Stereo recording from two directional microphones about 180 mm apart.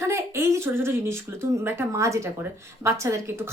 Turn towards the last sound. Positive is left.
turn(degrees=-15)  # may be behind; listen again after turning